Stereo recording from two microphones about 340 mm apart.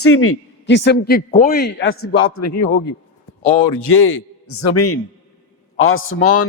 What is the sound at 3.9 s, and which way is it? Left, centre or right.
Speech, left.